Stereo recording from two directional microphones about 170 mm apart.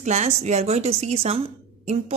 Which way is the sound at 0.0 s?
40° right (ahead or behind).